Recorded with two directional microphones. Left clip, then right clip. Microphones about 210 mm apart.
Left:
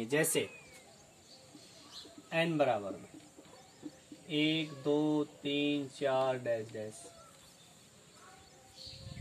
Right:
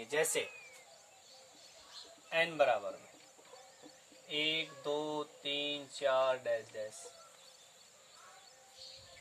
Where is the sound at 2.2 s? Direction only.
Centre (ahead or behind).